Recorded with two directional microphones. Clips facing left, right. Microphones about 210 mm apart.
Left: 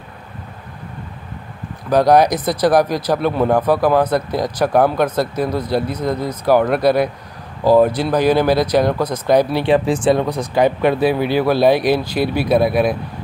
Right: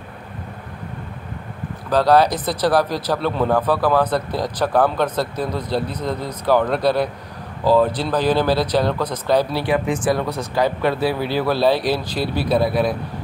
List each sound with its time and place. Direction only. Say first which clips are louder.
1.9 s speech: left 3 dB; 15° left (ahead or behind)